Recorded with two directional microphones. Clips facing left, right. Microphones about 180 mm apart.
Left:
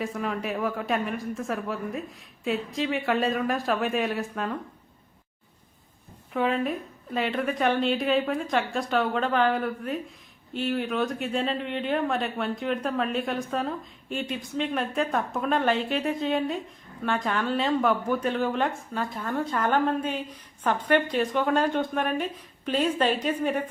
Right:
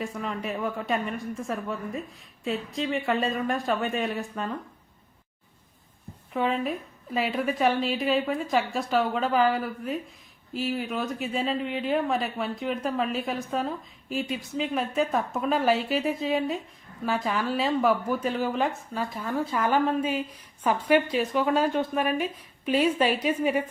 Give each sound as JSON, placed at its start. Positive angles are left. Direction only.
{"t": 0.0, "sound": "speech", "side_deg": 0}
{"t": 6.3, "sound": "a woman's voice", "side_deg": 0}